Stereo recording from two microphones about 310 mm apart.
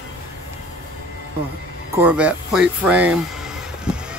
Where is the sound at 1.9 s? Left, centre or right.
Centre.